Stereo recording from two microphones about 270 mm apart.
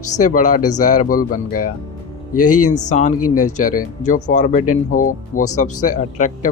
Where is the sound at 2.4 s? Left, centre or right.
Left.